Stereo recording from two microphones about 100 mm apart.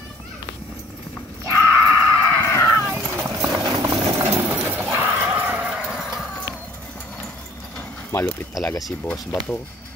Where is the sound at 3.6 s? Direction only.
40° right (ahead or behind).